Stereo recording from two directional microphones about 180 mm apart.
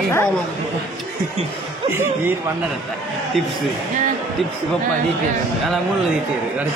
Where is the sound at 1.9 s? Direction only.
15° right (ahead or behind).